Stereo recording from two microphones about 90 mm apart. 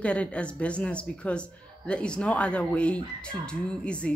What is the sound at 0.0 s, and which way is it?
Speech, 15° left (ahead or behind).